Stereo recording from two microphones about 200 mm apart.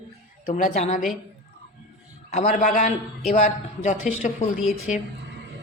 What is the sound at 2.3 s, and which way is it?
A man's voice, 35° left (ahead or behind).